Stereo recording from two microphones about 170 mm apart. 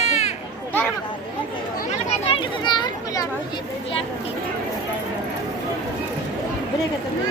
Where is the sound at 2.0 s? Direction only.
35° left (ahead or behind).